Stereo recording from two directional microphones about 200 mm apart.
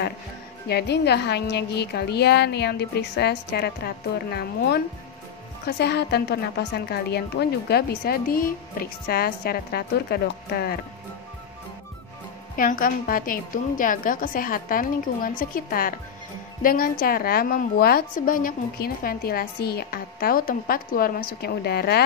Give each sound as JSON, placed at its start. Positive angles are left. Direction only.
{"t": 0.7, "sound": "a woman's voice", "side_deg": 55}
{"t": 12.5, "sound": "a woman's voice", "side_deg": 45}